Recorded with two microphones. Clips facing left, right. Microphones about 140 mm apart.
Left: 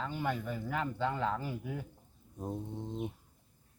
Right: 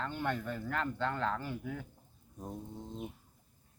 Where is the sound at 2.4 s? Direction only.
20° left (ahead or behind).